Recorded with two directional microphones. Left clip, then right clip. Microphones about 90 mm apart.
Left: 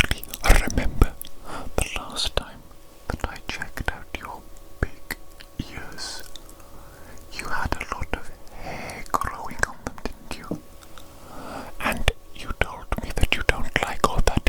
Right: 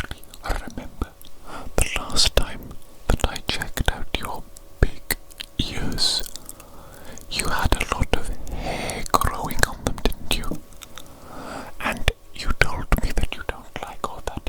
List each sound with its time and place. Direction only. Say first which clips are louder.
0.0 s whispering: left 10 dB; 30° left (ahead or behind)
1.5 s whispering: left 1 dB; centre (ahead or behind)
1.7 s whispering: right 5 dB; 20° right (ahead or behind)
3.1 s whispering: right 6 dB; 45° right (ahead or behind)
3.8 s whispering: right 5 dB; 55° right (ahead or behind)
5.5 s whispering: right 10 dB; 50° right (ahead or behind)
11.3 s a sound: right 1 dB; 10° right (ahead or behind)
12.4 s whispering: right 5 dB; 20° right (ahead or behind)
13.3 s whispering: left 9 dB; 30° left (ahead or behind)